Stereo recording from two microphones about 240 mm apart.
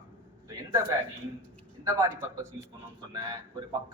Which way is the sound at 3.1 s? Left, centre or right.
Centre.